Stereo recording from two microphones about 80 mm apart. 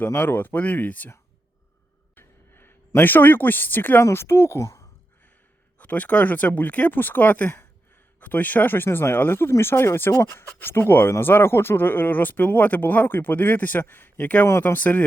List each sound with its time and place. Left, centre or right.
0.0 s speech: left
2.1 s a sound: left
4.0 s speech: left
5.8 s speech: centre